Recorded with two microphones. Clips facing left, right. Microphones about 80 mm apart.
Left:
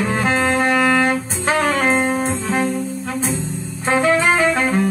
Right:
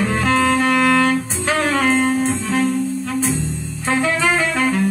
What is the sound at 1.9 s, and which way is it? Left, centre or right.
Music, left.